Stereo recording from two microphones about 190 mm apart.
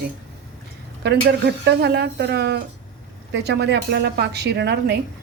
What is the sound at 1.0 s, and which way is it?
Speech, 60° right (ahead or behind).